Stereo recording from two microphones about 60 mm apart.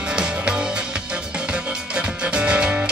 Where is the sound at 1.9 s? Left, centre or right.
Centre.